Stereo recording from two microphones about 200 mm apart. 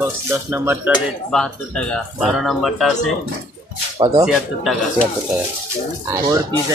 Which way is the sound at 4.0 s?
20° right (ahead or behind).